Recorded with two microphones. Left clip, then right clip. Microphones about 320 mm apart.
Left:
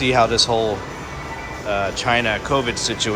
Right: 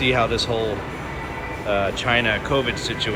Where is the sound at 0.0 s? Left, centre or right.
Centre.